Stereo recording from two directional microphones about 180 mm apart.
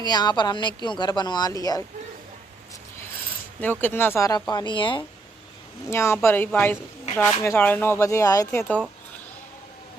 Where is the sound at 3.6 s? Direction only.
10° left (ahead or behind); by 5.0 s 25° left (ahead or behind).